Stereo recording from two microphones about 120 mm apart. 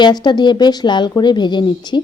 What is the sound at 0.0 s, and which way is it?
Speech, 35° left (ahead or behind).